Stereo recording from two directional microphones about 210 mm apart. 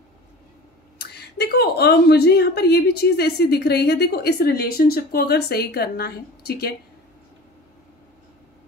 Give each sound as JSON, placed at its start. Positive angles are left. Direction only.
{"t": 0.9, "sound": "speech", "side_deg": 50}